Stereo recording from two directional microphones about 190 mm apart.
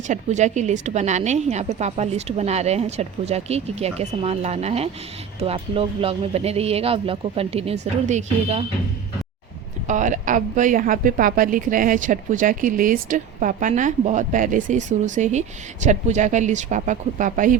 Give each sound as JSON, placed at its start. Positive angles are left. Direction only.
{"t": 0.1, "sound": "speech", "side_deg": -40}
{"t": 9.8, "sound": "a woman's voice", "side_deg": -40}